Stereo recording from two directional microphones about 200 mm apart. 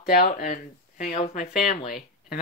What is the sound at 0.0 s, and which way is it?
Speech, 45° left (ahead or behind).